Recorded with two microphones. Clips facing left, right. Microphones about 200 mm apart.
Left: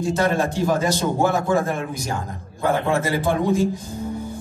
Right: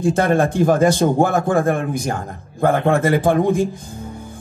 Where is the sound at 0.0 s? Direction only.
55° right (ahead or behind).